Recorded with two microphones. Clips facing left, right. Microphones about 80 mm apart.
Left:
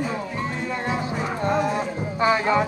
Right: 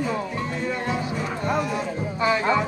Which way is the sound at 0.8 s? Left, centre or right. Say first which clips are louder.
Left 1 dB; left.